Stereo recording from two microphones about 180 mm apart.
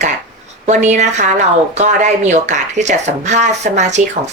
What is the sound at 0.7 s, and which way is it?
Speech, 40° right (ahead or behind).